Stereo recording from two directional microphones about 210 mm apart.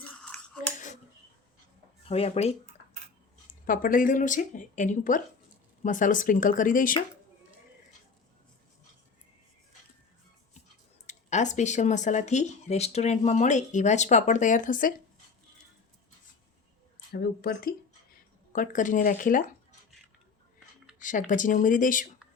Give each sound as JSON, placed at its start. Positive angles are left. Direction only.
{"t": 0.0, "sound": "a sound", "side_deg": 5}
{"t": 0.6, "sound": "a sound", "side_deg": 40}
{"t": 2.0, "sound": "speech", "side_deg": 30}
{"t": 3.7, "sound": "speech", "side_deg": 40}
{"t": 11.0, "sound": "speech", "side_deg": 35}
{"t": 17.1, "sound": "speech", "side_deg": 50}
{"t": 21.0, "sound": "speech", "side_deg": 40}